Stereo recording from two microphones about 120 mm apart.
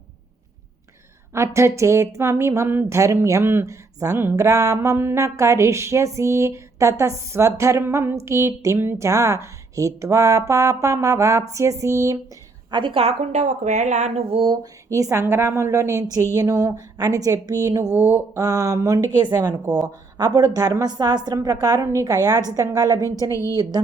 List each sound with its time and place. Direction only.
1.3 s a woman's voice: 25° right (ahead or behind)
12.7 s a woman's voice: 45° right (ahead or behind); by 14.3 s 80° right
14.3 s speech: 50° right (ahead or behind)
14.5 s a woman's voice: 30° right (ahead or behind)
17.9 s mantra: 15° right (ahead or behind)
18.3 s a woman's voice: 25° right (ahead or behind)
19.2 s a woman's voice: 35° right (ahead or behind)
23.3 s a woman's voice: 25° left (ahead or behind)